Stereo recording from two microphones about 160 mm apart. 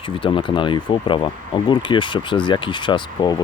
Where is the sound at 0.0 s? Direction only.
30° left (ahead or behind).